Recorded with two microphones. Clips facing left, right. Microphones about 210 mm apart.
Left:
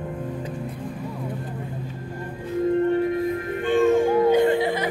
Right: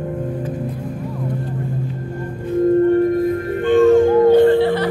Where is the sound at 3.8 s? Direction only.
15° left (ahead or behind).